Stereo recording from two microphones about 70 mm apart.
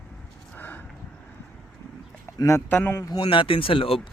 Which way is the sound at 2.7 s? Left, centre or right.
Left.